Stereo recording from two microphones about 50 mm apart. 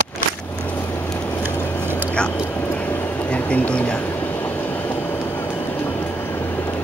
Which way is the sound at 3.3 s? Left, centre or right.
Left.